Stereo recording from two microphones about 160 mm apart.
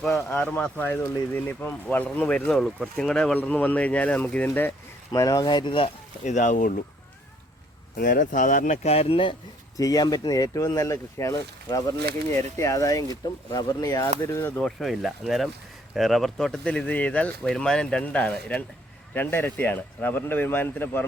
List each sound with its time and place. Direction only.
0.3 s speech: 10° left (ahead or behind)
5.1 s speech: 25° left (ahead or behind)
6.2 s speech: 50° left (ahead or behind)
7.9 s speech: 55° left (ahead or behind); by 9.3 s 35° left (ahead or behind)
9.7 s speech: 20° left (ahead or behind)
14.6 s speech: centre (ahead or behind)